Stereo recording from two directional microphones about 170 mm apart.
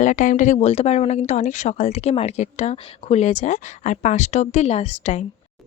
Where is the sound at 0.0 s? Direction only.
45° left (ahead or behind).